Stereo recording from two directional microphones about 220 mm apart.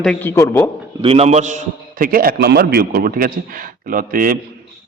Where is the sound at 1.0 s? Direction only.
25° right (ahead or behind).